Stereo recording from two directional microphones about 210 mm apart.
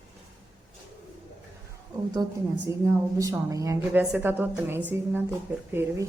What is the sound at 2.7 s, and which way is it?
Speech, 15° right (ahead or behind).